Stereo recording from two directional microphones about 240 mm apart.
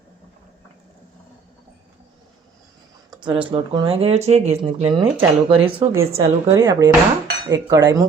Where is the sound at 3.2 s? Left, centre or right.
Centre.